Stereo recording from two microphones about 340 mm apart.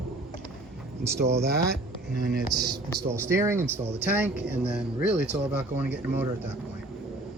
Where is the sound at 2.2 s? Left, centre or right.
Right.